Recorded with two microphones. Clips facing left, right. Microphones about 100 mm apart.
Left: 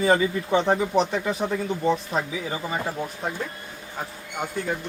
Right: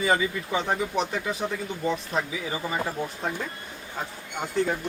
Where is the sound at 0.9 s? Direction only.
Centre (ahead or behind).